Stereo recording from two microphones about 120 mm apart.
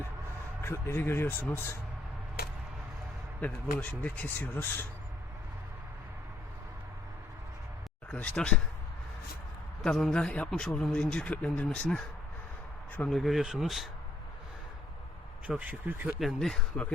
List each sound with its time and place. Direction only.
0.6 s speech: 20° left (ahead or behind)
3.4 s speech: 10° left (ahead or behind)
8.1 s speech: 10° left (ahead or behind)
9.8 s speech: 5° left (ahead or behind)
13.1 s speech: centre (ahead or behind)
15.4 s speech: 10° right (ahead or behind)
16.1 s speech: centre (ahead or behind)